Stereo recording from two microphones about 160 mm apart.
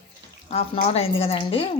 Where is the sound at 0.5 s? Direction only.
40° left (ahead or behind).